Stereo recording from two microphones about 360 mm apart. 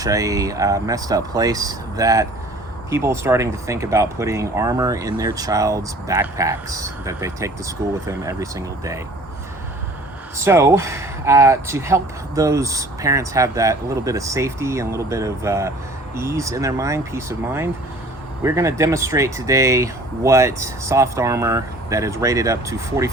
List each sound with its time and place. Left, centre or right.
0.0 s speech: centre
10.3 s speech: centre